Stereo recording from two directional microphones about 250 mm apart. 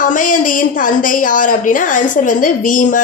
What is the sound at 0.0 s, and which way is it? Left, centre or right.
A woman's voice, left.